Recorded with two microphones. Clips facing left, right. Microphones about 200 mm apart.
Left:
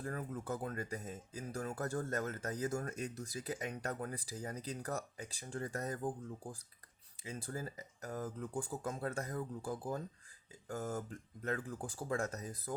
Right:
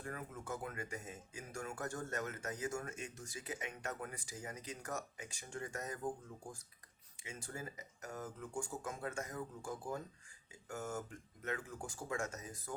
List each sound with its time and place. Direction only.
0.0 s speech: 35° left (ahead or behind)
7.2 s speech: 35° left (ahead or behind)